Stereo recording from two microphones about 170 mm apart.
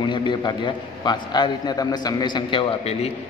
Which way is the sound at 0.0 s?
30° left (ahead or behind).